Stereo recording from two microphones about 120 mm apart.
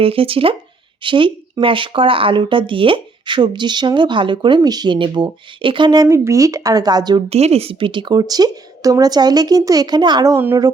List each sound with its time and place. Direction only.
0.0 s speech: 50° right (ahead or behind)
6.1 s a woman's voice: 25° right (ahead or behind)
7.3 s a woman's voice: 60° right (ahead or behind); by 10.3 s 35° right (ahead or behind)
10.3 s a woman's voice: 20° right (ahead or behind)